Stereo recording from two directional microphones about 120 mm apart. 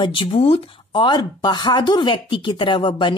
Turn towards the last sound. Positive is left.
turn(degrees=40)  # may be behind; listen again after turning